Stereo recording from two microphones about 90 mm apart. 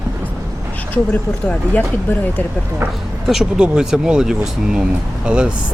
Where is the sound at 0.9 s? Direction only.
20° left (ahead or behind).